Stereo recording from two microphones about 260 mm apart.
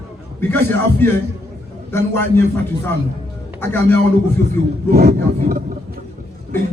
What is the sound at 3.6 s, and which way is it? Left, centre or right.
Speech, centre.